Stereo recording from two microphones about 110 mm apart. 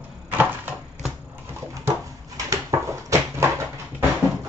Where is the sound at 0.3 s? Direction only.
15° right (ahead or behind).